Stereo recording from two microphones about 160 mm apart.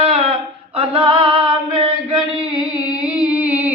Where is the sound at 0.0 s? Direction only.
35° right (ahead or behind).